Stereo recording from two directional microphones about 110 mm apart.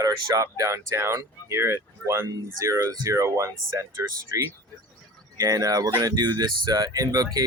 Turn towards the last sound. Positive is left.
turn(degrees=-35)  # may be behind; listen again after turning